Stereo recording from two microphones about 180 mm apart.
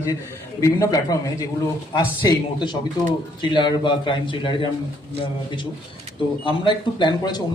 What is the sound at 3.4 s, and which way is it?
Speech, 25° left (ahead or behind).